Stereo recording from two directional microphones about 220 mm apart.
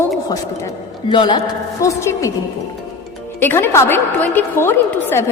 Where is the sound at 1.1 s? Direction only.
20° left (ahead or behind).